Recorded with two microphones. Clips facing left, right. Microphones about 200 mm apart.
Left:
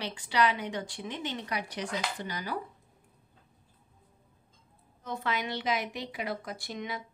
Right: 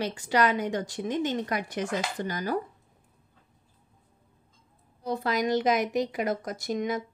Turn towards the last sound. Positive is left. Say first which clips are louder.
# right 9 dB
turn(degrees=-45)  # may be behind; listen again after turning